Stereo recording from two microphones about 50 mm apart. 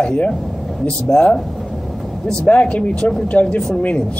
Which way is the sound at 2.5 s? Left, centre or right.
Left.